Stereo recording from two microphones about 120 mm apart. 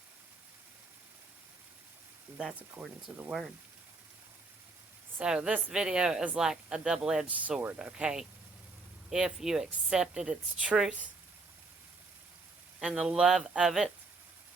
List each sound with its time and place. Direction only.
2.4 s speech: 10° right (ahead or behind)
5.2 s speech: 5° right (ahead or behind)
12.8 s speech: 5° right (ahead or behind)